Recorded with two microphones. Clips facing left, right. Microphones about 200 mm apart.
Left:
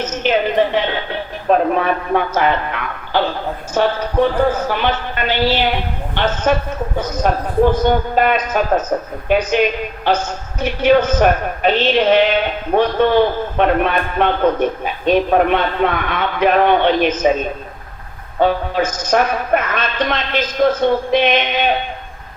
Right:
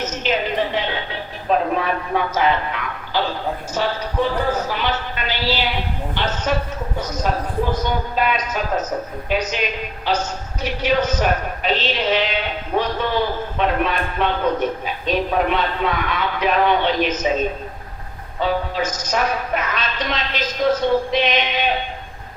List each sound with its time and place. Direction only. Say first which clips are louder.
0.0 s a woman's voice: left 5 dB; 55° left (ahead or behind)
18.3 s a woman's voice: left 5 dB; 55° left (ahead or behind)